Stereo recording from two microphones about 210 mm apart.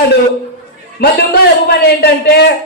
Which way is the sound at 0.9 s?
50° left (ahead or behind).